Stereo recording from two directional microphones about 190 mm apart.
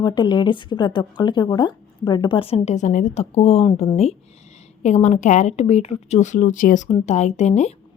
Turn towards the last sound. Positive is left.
turn(degrees=35)  # may be behind; listen again after turning